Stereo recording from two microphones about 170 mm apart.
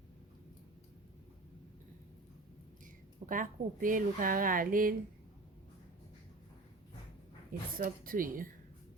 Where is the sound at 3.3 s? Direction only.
50° right (ahead or behind).